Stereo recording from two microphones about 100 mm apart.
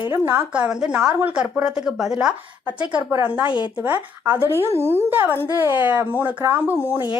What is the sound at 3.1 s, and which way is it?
A woman's voice, 15° right (ahead or behind).